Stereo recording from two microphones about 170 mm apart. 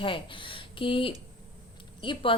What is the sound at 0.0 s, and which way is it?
A woman's voice, 30° left (ahead or behind).